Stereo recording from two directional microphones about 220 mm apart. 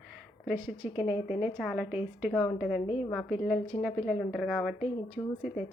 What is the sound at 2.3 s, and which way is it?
Speech, 5° left (ahead or behind).